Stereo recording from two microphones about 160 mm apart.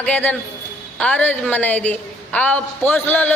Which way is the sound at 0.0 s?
10° left (ahead or behind).